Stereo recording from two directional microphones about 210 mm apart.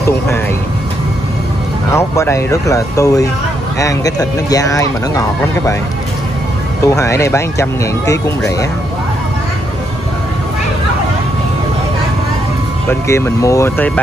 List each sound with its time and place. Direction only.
1.9 s speech: 15° left (ahead or behind)
6.8 s speech: 15° left (ahead or behind)
13.1 s speech: 15° left (ahead or behind)